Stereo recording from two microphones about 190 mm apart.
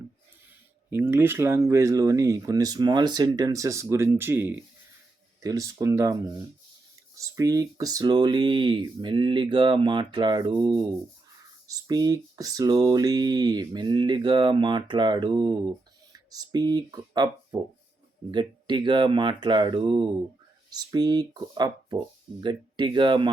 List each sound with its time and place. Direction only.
0.9 s speech: 10° right (ahead or behind)